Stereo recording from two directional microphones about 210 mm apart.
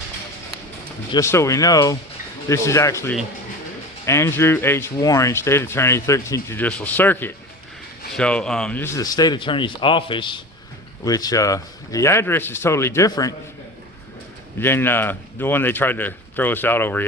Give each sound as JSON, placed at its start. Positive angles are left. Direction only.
{"t": 1.1, "sound": "speech", "side_deg": 15}
{"t": 14.6, "sound": "speech", "side_deg": 10}